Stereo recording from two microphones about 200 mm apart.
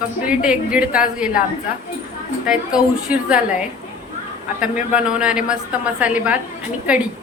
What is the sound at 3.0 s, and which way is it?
Speech, 5° right (ahead or behind).